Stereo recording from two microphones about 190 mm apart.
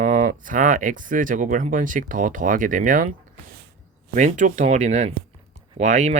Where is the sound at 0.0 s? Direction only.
45° right (ahead or behind).